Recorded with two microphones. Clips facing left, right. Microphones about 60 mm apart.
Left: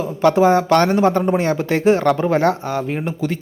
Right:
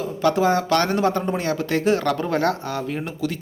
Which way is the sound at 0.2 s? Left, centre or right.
Left.